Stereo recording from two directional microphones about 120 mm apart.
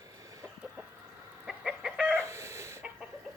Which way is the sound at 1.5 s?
5° right (ahead or behind).